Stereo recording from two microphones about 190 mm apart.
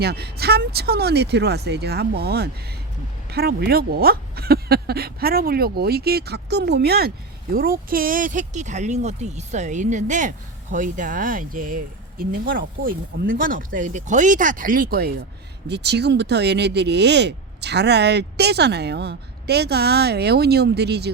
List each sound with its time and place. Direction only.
0.0 s speech: 55° right (ahead or behind)